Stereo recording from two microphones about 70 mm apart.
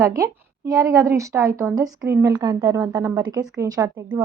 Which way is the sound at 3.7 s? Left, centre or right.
Right.